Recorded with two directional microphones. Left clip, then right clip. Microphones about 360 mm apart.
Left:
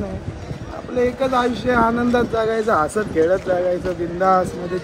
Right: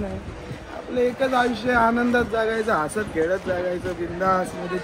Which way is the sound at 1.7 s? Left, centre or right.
Centre.